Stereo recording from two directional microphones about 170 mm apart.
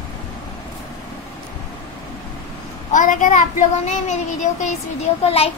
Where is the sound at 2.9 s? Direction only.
50° left (ahead or behind).